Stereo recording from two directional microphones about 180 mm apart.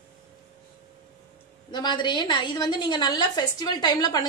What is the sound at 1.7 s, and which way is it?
A woman's voice, 25° left (ahead or behind).